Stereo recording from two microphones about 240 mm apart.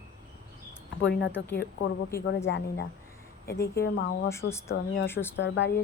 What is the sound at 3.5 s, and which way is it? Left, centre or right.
Speech, centre.